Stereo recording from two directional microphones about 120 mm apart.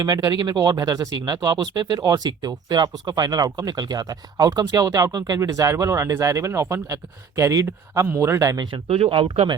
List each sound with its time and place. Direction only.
0.0 s speech: 35° right (ahead or behind)
8.9 s speech: 50° right (ahead or behind)